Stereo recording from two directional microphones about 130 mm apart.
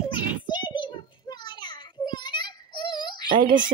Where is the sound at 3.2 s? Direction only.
40° right (ahead or behind).